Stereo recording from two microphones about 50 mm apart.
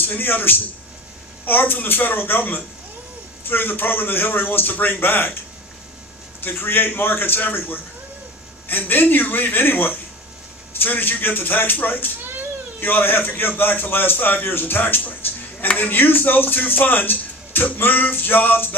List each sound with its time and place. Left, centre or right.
0.0 s speech: left
6.4 s a man's voice: left